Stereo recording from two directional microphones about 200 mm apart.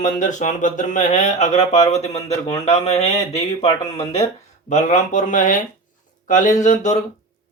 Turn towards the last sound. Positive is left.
turn(degrees=35)  # may be behind; listen again after turning